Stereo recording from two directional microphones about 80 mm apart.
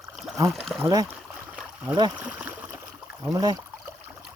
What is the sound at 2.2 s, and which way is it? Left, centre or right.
Speech, centre.